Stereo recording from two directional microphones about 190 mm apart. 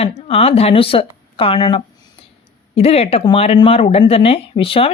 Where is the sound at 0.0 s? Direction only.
30° left (ahead or behind).